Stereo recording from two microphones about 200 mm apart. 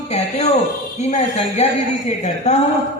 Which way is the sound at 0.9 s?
30° left (ahead or behind).